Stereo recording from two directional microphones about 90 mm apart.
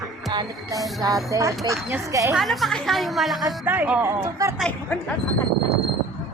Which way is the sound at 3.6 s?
20° right (ahead or behind).